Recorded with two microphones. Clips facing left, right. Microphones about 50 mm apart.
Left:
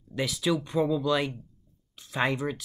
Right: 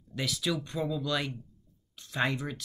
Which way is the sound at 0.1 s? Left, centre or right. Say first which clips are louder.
Left 5 dB; centre.